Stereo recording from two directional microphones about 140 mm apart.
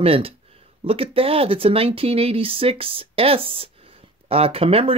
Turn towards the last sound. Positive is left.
turn(degrees=-45)  # may be behind; listen again after turning